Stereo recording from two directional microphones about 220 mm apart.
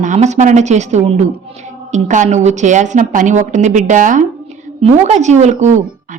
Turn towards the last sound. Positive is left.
turn(degrees=-35)  # may be behind; listen again after turning